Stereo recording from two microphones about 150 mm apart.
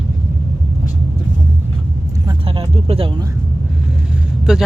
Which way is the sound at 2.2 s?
35° right (ahead or behind).